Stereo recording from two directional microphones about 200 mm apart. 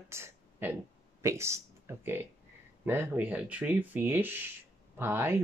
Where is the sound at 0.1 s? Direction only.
10° right (ahead or behind).